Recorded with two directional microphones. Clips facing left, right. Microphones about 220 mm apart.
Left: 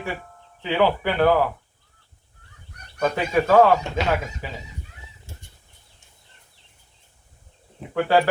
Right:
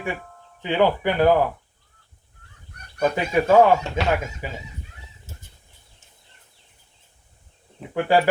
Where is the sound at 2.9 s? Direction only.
10° right (ahead or behind).